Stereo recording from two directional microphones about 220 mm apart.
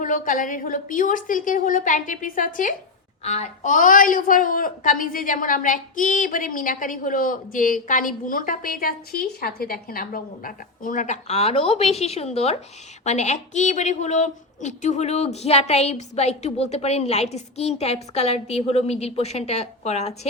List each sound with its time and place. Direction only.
0.0 s a woman's voice: 35° left (ahead or behind)